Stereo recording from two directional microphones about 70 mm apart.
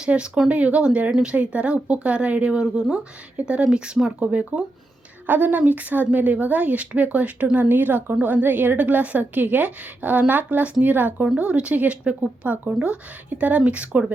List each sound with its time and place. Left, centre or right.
0.0 s speech: centre
4.2 s a woman's voice: right